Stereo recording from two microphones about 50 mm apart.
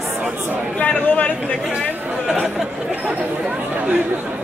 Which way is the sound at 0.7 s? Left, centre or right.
Left.